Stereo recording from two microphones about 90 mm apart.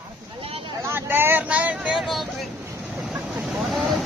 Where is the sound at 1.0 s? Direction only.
25° right (ahead or behind).